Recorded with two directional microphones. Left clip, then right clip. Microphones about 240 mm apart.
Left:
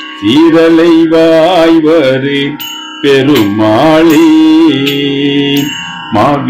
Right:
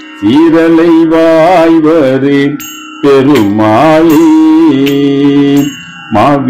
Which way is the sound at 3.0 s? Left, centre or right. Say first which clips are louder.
Right 1 dB; centre.